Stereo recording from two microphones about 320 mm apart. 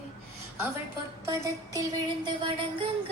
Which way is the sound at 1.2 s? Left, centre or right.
Centre.